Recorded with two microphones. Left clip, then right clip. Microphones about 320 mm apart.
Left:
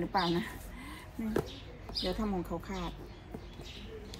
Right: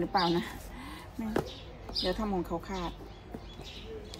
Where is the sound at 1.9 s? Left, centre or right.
Centre.